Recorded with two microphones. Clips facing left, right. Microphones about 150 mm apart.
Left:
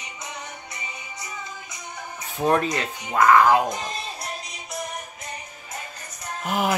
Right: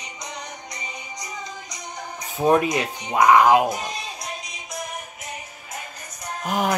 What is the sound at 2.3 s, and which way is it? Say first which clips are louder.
Speech: right 3 dB; 10° right (ahead or behind).